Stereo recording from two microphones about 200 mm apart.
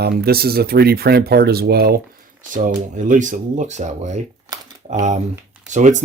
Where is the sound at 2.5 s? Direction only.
40° right (ahead or behind).